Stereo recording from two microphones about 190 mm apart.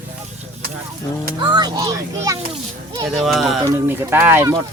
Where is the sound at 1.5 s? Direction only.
20° right (ahead or behind).